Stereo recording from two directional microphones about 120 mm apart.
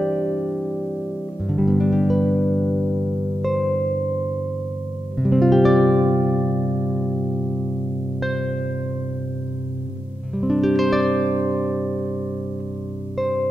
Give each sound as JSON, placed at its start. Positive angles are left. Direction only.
{"t": 0.0, "sound": "music", "side_deg": -10}
{"t": 5.2, "sound": "music", "side_deg": 0}
{"t": 6.1, "sound": "music", "side_deg": -20}
{"t": 8.2, "sound": "music", "side_deg": 0}
{"t": 10.3, "sound": "music", "side_deg": 0}
{"t": 11.3, "sound": "music", "side_deg": -20}